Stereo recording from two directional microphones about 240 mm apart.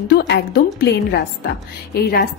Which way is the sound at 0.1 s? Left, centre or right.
Left.